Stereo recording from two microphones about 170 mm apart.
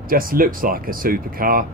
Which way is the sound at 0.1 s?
55° right (ahead or behind).